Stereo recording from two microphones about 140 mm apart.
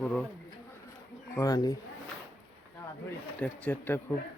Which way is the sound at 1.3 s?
25° left (ahead or behind).